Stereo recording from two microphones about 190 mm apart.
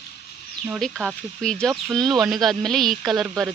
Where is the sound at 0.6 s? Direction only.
Centre (ahead or behind).